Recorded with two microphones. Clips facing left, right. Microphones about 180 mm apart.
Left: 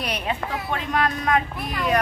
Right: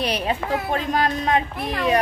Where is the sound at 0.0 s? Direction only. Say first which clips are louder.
Right 4 dB; 30° right (ahead or behind).